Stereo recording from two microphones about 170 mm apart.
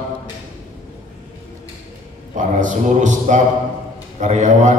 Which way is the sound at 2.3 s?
45° right (ahead or behind).